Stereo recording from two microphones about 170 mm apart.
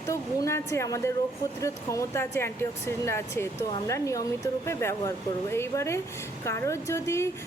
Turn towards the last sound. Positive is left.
turn(degrees=15)  # may be behind; listen again after turning